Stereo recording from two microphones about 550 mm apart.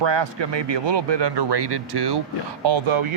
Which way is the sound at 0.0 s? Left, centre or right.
Right.